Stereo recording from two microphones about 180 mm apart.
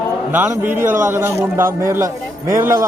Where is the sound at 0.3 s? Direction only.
10° right (ahead or behind).